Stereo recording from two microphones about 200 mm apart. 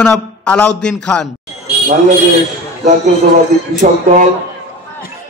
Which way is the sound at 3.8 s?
40° right (ahead or behind).